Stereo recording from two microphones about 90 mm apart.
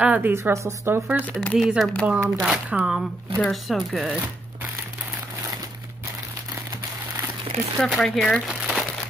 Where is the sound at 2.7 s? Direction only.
10° right (ahead or behind).